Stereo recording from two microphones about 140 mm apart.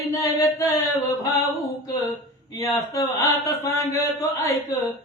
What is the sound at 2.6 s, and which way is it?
Speech, 25° left (ahead or behind).